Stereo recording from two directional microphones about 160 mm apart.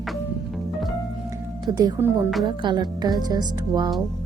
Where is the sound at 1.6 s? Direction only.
25° right (ahead or behind).